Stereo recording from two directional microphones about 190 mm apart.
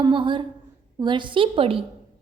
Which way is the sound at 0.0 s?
25° right (ahead or behind).